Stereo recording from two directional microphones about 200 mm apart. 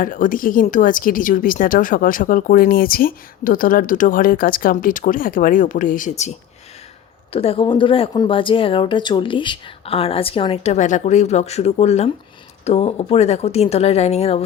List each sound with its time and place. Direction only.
0.0 s a woman's voice: 40° left (ahead or behind)
7.3 s speech: 30° left (ahead or behind)